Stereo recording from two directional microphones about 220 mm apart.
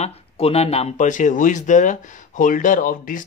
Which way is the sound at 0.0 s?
30° left (ahead or behind).